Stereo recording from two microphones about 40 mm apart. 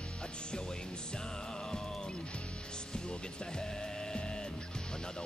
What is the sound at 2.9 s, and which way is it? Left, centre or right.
Music, centre.